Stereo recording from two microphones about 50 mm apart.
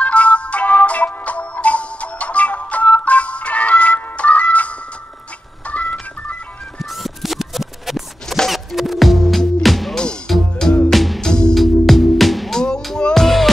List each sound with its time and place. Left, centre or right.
0.0 s music: left
6.8 s music: centre
11.1 s music: centre
11.5 s music: centre
12.5 s music: centre